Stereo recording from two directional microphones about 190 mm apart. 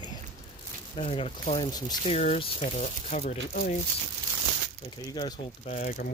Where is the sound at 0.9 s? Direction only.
30° left (ahead or behind).